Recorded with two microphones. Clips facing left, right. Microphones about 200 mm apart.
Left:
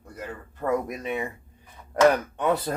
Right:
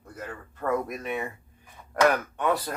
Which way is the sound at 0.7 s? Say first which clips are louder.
Left 2 dB; 15° left (ahead or behind).